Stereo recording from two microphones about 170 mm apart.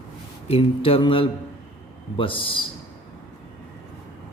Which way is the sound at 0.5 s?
30° left (ahead or behind).